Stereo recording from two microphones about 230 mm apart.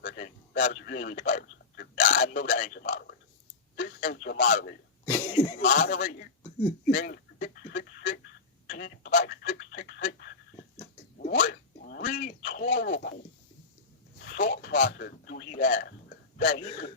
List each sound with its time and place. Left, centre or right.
0.0 s a sound: left
1.1 s a man's voice: left
4.5 s speech: left
5.0 s speech: centre
5.3 s a man's voice: left
8.6 s a sound: left
14.3 s a man's voice: left